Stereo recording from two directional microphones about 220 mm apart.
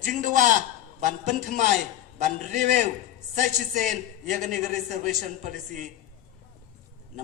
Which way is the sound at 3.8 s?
35° right (ahead or behind).